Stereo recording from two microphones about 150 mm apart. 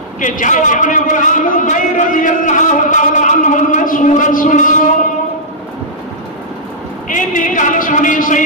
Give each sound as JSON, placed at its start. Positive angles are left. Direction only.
{"t": 0.2, "sound": "a man's voice", "side_deg": 60}
{"t": 7.1, "sound": "a man's voice", "side_deg": 60}